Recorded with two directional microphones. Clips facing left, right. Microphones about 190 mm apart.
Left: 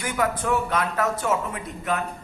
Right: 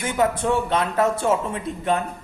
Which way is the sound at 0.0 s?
25° right (ahead or behind).